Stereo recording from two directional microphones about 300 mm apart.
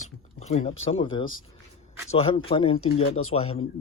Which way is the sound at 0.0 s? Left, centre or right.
Left.